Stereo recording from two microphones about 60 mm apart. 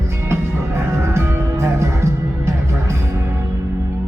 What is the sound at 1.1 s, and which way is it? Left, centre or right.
Music, right.